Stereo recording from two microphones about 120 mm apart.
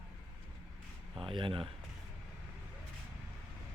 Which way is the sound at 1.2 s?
45° right (ahead or behind).